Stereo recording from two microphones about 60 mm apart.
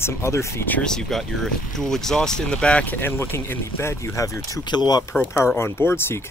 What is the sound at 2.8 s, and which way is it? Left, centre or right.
Speech, left.